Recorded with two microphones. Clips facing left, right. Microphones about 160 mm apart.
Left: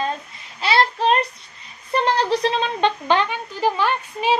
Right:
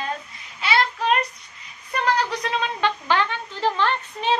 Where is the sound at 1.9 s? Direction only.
30° left (ahead or behind).